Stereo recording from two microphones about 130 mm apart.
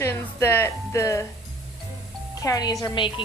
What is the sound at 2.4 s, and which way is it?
Speech, 30° left (ahead or behind).